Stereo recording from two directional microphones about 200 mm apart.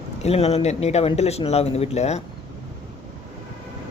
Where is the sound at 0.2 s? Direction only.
30° left (ahead or behind).